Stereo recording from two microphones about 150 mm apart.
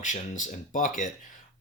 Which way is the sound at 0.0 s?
55° left (ahead or behind).